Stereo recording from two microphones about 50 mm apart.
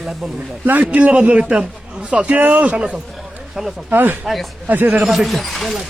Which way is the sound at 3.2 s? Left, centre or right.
Centre.